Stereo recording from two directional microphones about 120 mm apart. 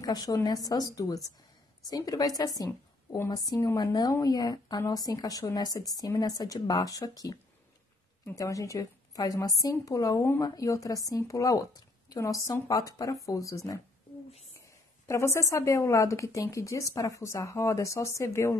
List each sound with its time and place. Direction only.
0.0 s a woman's voice: 35° left (ahead or behind)
15.0 s a woman's voice: 25° left (ahead or behind)